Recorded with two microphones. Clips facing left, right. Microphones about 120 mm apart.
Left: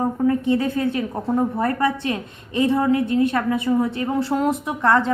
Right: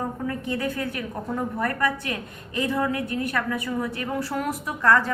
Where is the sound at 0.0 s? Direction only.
25° left (ahead or behind).